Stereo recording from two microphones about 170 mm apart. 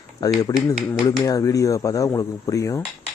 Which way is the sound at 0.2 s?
20° left (ahead or behind).